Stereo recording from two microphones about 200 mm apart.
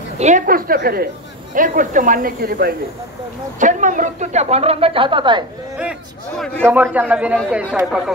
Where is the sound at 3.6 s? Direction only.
40° right (ahead or behind); by 5.5 s 25° right (ahead or behind).